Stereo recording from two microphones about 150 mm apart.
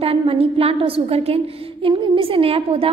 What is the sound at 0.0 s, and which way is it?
A woman's voice, 40° right (ahead or behind).